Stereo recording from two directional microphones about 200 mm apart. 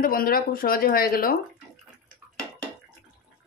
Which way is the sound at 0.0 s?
45° left (ahead or behind).